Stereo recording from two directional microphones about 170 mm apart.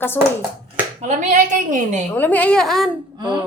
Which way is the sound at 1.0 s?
45° right (ahead or behind).